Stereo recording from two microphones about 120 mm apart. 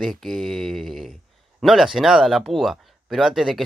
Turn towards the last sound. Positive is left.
turn(degrees=-5)  # may be behind; listen again after turning